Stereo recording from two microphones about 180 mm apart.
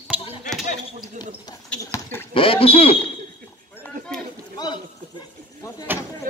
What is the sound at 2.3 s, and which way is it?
Speech, 30° left (ahead or behind).